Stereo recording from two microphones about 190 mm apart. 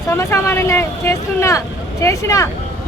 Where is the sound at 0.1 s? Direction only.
15° left (ahead or behind).